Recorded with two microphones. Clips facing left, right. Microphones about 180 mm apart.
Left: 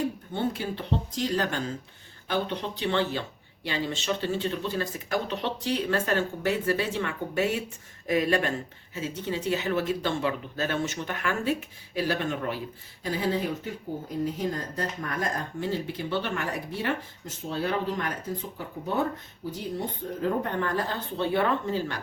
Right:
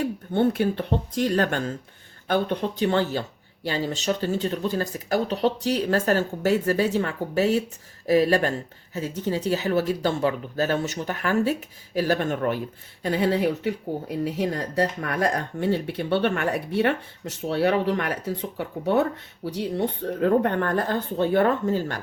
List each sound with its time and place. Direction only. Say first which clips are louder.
0.3 s speech: right 10 dB; 60° right (ahead or behind)
13.0 s speech: right 6 dB; 65° right (ahead or behind); by 22.0 s 45° right (ahead or behind)